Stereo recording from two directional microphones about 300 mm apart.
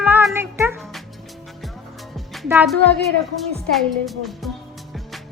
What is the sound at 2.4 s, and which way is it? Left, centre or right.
Speech, centre.